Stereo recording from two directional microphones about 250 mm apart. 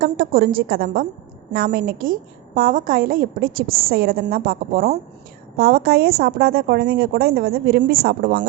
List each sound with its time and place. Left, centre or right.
0.0 s speech: right